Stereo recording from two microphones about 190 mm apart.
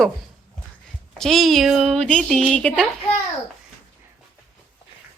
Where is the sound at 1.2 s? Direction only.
Centre (ahead or behind).